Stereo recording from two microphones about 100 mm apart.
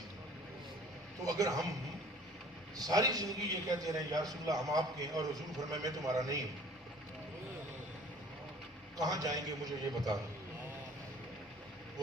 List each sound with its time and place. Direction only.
1.2 s a man's voice: 35° right (ahead or behind)
2.7 s a man's voice: 40° right (ahead or behind)
9.0 s a man's voice: 40° right (ahead or behind)